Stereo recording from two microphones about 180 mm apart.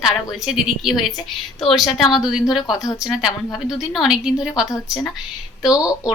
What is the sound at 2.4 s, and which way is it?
Speech, 20° left (ahead or behind).